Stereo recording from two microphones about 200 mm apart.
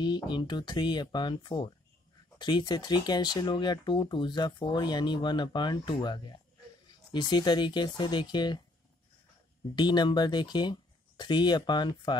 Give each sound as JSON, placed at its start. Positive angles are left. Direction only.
{"t": 0.0, "sound": "speech", "side_deg": 20}
{"t": 9.8, "sound": "speech", "side_deg": 20}